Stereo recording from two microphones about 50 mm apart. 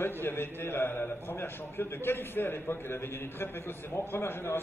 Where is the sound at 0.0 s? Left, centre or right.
Left.